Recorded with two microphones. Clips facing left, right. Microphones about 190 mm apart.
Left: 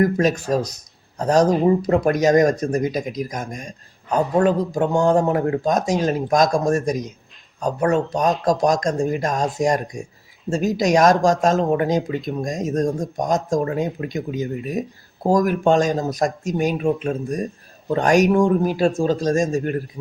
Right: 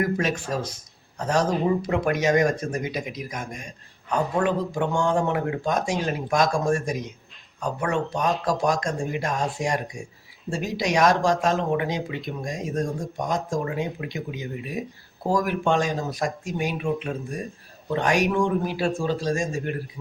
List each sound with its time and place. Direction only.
0.0 s speech: 40° left (ahead or behind)